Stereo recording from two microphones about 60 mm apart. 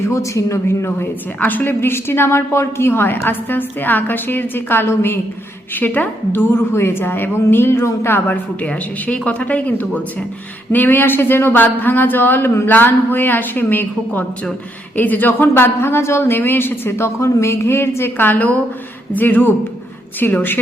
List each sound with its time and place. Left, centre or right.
0.0 s a woman's voice: left
1.4 s a woman's voice: left
8.6 s a woman's voice: left
17.2 s a woman's voice: left